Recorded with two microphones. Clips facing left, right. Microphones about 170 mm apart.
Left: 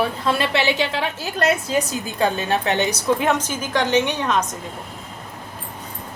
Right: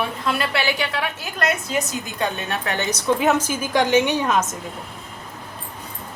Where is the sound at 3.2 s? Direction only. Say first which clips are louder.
Right 2 dB; 5° right (ahead or behind).